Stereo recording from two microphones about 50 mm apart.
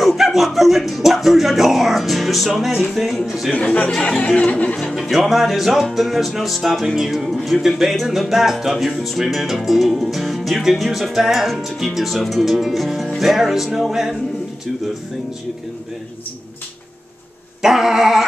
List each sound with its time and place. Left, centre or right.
0.0 s music: centre
3.5 s music: left
5.1 s music: centre
17.6 s a sound: centre